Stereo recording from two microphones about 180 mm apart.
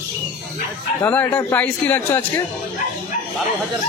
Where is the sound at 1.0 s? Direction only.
10° left (ahead or behind).